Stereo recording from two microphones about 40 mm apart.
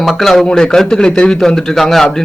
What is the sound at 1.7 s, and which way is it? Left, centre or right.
Speech, centre.